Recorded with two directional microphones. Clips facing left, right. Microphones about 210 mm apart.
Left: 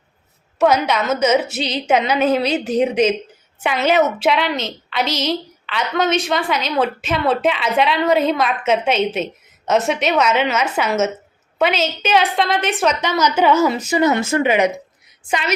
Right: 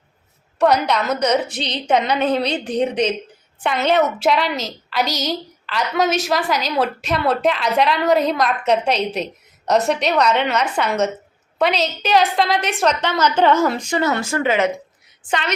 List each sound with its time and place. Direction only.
0.6 s a woman's voice: 5° left (ahead or behind)
14.0 s speech: 20° left (ahead or behind)